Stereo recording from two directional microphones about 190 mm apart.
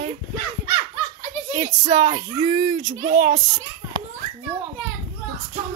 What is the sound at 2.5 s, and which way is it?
Speech, 45° right (ahead or behind).